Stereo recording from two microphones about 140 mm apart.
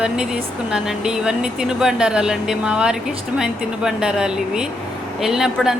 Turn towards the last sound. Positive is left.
turn(degrees=-5)  # may be behind; listen again after turning